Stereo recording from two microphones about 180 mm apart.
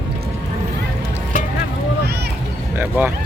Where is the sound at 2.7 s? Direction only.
10° right (ahead or behind).